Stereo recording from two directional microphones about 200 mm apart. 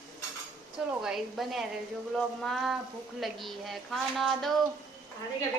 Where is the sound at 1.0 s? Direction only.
Centre (ahead or behind).